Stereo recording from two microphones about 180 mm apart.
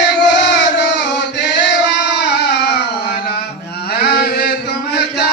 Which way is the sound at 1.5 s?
75° left (ahead or behind).